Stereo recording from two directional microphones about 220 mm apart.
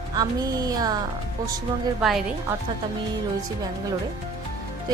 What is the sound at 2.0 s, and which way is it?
Speech, centre (ahead or behind).